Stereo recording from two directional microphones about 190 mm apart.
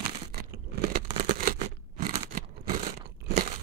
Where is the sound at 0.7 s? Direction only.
50° right (ahead or behind).